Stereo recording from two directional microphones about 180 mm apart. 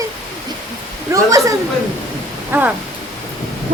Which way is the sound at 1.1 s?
20° right (ahead or behind).